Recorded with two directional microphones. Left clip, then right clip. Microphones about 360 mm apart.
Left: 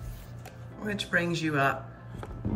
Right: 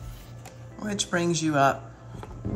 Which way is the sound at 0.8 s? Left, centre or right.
Centre.